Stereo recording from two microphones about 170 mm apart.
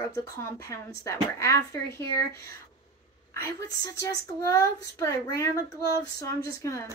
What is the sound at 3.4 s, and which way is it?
A woman's voice, 20° left (ahead or behind).